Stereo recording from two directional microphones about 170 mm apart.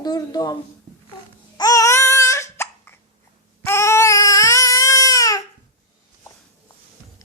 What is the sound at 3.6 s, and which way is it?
Baby cry, 15° left (ahead or behind).